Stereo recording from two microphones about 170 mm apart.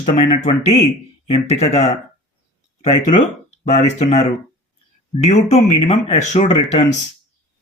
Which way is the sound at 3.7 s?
40° left (ahead or behind).